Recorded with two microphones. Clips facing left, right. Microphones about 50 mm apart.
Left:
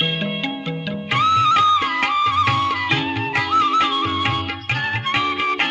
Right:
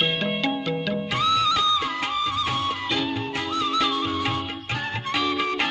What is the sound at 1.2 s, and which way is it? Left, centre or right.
Music, left.